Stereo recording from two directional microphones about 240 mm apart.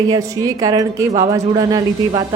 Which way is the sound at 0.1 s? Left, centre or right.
Centre.